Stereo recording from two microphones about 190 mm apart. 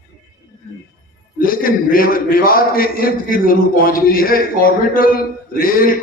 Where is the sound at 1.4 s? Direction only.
50° left (ahead or behind).